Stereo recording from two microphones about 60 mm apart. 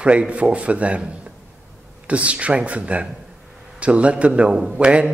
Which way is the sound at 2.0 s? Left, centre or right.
Right.